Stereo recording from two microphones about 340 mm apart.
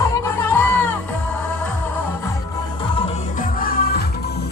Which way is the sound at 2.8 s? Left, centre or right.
Centre.